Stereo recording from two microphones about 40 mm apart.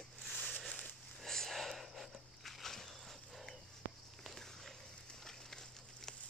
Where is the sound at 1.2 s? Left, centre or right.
Centre.